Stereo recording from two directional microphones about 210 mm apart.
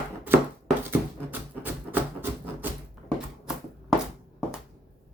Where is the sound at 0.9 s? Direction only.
10° right (ahead or behind).